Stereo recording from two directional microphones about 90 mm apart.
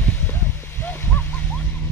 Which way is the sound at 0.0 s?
20° left (ahead or behind).